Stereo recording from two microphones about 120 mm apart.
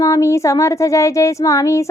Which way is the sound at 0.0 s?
25° left (ahead or behind).